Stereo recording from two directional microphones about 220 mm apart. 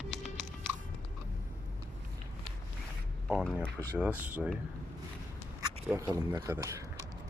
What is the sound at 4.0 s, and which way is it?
Speech, 5° right (ahead or behind).